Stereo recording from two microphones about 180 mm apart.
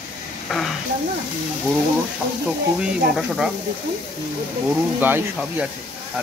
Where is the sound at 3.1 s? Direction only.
Centre (ahead or behind).